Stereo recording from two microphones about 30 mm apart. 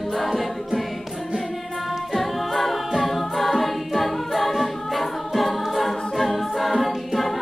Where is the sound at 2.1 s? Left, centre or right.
Centre.